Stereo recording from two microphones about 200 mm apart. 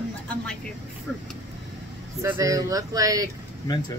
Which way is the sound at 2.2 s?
15° right (ahead or behind).